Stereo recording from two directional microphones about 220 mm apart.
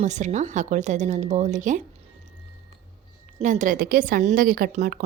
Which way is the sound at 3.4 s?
35° right (ahead or behind).